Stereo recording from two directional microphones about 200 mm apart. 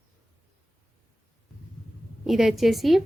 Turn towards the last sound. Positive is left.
turn(degrees=0)  # may be behind; listen again after turning